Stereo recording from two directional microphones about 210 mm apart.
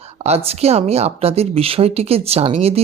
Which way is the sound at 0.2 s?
30° right (ahead or behind).